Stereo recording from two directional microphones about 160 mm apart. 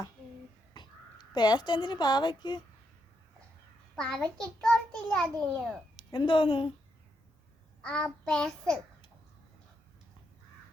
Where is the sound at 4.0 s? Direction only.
5° left (ahead or behind).